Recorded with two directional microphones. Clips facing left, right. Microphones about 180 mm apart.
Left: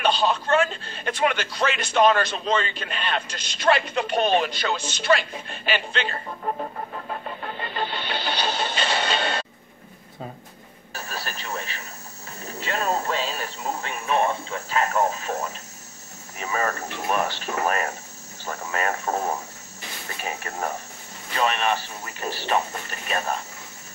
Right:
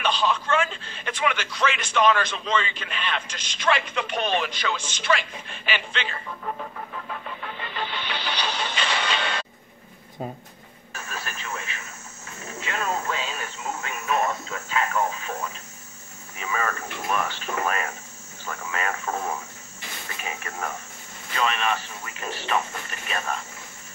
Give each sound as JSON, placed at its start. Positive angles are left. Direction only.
{"t": 0.0, "sound": "speech", "side_deg": 40}
{"t": 8.7, "sound": "a sound", "side_deg": 35}
{"t": 10.9, "sound": "radio", "side_deg": 35}
{"t": 12.4, "sound": "speech", "side_deg": 35}